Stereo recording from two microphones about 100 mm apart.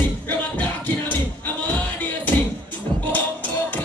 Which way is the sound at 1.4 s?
15° left (ahead or behind).